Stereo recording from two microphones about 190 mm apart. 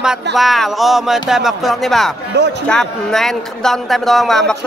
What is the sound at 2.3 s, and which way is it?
Speech, 65° right (ahead or behind).